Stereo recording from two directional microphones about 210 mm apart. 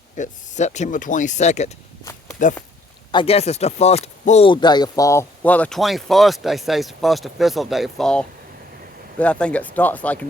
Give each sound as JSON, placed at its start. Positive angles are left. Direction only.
{"t": 0.2, "sound": "speech", "side_deg": 35}
{"t": 3.1, "sound": "speech", "side_deg": 25}